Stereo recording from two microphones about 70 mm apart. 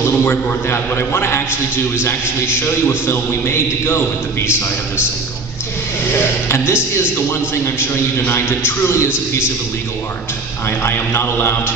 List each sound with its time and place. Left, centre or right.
0.2 s a man's voice: left
6.1 s a man's voice: left
10.8 s a man's voice: left